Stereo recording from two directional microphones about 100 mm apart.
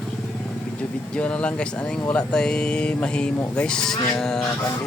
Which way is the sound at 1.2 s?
10° left (ahead or behind).